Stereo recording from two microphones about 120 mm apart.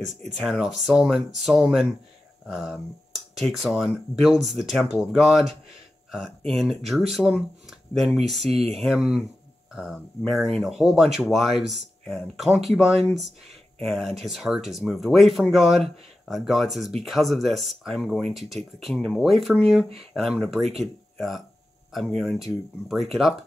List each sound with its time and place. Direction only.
0.0 s speech: centre (ahead or behind)
6.5 s speech: centre (ahead or behind)